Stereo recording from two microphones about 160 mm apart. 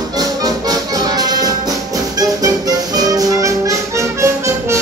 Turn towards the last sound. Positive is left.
turn(degrees=-20)  # may be behind; listen again after turning